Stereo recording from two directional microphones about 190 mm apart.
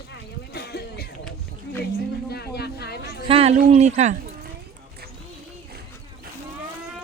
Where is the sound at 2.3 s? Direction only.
55° left (ahead or behind).